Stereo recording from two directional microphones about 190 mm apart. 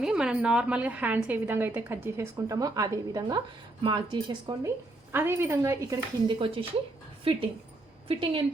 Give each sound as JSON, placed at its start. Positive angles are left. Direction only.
{"t": 0.0, "sound": "a woman's voice", "side_deg": -5}
{"t": 5.1, "sound": "a woman's voice", "side_deg": -15}
{"t": 6.2, "sound": "speech", "side_deg": -25}
{"t": 8.0, "sound": "a woman's voice", "side_deg": -30}